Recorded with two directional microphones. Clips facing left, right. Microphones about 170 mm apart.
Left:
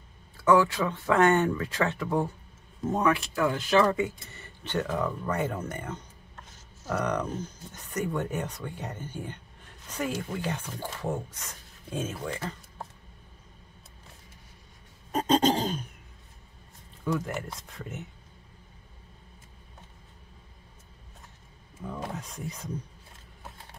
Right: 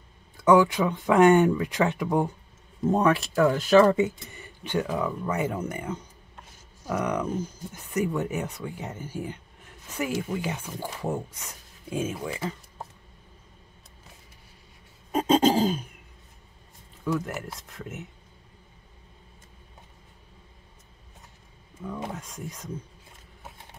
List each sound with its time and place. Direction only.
0.4 s speech: 15° right (ahead or behind)
2.9 s speech: 35° right (ahead or behind)
3.9 s speech: 20° right (ahead or behind)
15.0 s a sound: 5° right (ahead or behind)
17.0 s speech: 5° right (ahead or behind)
21.8 s speech: centre (ahead or behind)